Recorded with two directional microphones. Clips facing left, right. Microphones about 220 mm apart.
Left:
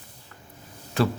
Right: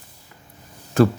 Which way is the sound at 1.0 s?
45° right (ahead or behind).